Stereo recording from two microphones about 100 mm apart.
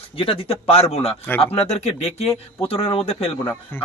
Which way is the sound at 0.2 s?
70° left (ahead or behind).